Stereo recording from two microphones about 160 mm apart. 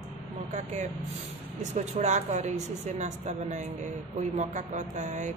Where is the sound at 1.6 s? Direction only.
45° right (ahead or behind).